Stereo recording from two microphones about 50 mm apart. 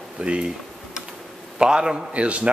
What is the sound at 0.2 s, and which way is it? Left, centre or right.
Speech, right.